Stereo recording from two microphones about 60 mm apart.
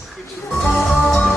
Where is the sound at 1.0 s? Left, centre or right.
Centre.